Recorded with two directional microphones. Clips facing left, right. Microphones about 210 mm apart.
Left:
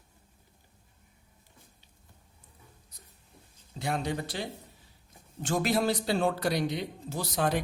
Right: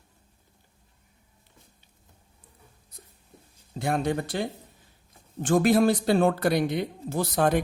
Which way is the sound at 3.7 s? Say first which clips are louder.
Right 5 dB; 55° right (ahead or behind).